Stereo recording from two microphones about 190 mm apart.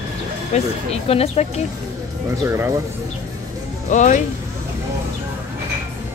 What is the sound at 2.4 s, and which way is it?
Speech, 15° right (ahead or behind).